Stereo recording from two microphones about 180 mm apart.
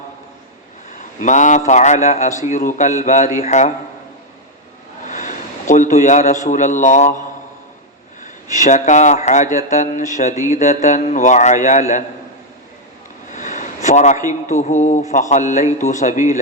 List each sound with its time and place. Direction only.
0.9 s a man's voice: 45° left (ahead or behind)
5.0 s a man's voice: 45° left (ahead or behind)
8.5 s speech: 40° left (ahead or behind)
13.3 s a man's voice: 45° left (ahead or behind)